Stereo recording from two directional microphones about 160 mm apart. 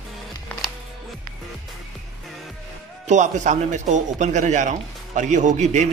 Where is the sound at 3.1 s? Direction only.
50° right (ahead or behind).